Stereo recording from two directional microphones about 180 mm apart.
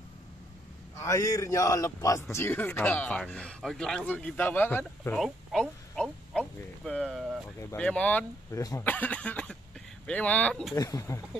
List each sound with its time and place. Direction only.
0.9 s speech: 15° left (ahead or behind)
5.2 s a sound: centre (ahead or behind)
7.7 s speech: 5° left (ahead or behind)
10.8 s speech: 20° left (ahead or behind)